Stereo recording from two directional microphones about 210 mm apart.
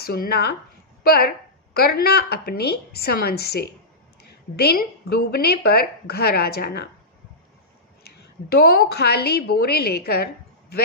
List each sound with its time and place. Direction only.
0.0 s a woman's voice: 45° left (ahead or behind)
8.0 s a woman's voice: 50° left (ahead or behind)